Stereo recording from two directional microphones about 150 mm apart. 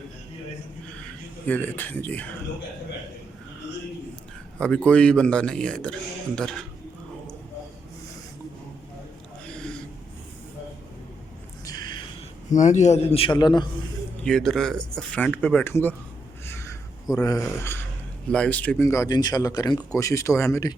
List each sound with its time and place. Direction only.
1.5 s speech: 10° left (ahead or behind)
4.5 s speech: 5° left (ahead or behind)
9.6 s gasp: 5° left (ahead or behind)
11.6 s a sound: 25° left (ahead or behind)
12.5 s a man's voice: 55° left (ahead or behind); by 13.7 s 30° left (ahead or behind)
14.3 s speech: 5° left (ahead or behind)
16.5 s a sound: 15° left (ahead or behind)
17.2 s speech: 20° left (ahead or behind)